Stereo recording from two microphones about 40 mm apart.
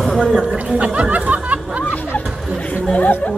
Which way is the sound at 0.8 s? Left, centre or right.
Right.